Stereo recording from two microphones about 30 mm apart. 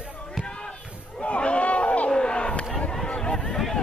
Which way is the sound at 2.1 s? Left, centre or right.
Left.